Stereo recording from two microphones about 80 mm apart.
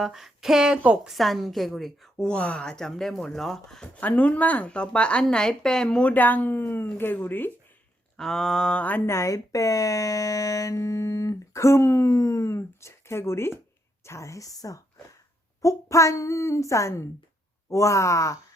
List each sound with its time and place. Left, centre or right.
0.0 s a woman's voice: centre
4.0 s speech: centre
8.1 s speech: centre
9.0 s speech: left